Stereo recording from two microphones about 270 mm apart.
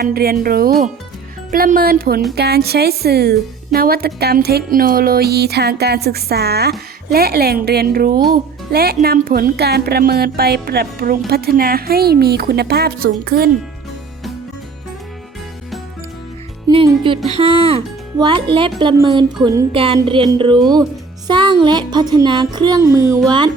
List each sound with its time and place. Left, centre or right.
0.0 s speech: right
16.6 s speech: centre
18.8 s music: centre